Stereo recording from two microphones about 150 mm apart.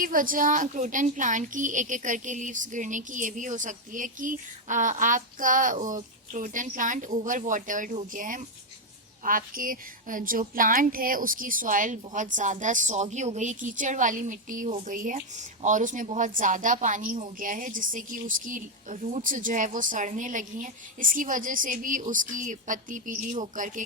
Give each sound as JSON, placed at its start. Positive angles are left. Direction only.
{"t": 0.0, "sound": "a woman's voice", "side_deg": -65}